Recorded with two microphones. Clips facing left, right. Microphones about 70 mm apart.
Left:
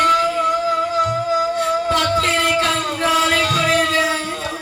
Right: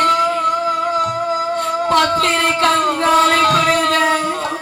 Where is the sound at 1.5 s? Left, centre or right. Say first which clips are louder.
Right 2 dB; right.